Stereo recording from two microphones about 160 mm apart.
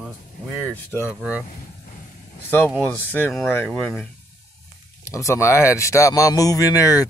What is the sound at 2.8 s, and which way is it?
Speech, 10° left (ahead or behind).